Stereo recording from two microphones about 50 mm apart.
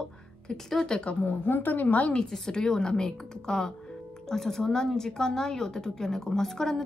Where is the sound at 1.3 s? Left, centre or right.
Left.